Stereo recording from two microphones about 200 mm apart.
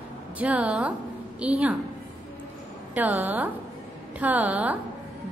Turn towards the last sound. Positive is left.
turn(degrees=-10)  # may be behind; listen again after turning